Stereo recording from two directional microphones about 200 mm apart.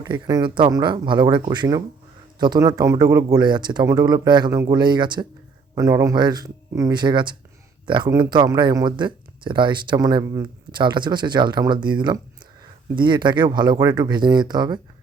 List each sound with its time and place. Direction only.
0.0 s speech: 20° right (ahead or behind)